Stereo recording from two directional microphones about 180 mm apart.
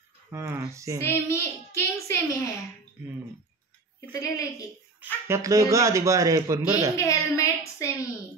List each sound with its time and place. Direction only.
0.3 s speech: 10° right (ahead or behind)
1.0 s a child's voice: 15° left (ahead or behind)
4.1 s a woman's voice: 20° left (ahead or behind)
5.0 s speech: 15° right (ahead or behind)
7.0 s a sound: 15° left (ahead or behind)